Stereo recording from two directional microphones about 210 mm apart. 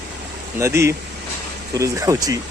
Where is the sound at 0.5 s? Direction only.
15° right (ahead or behind).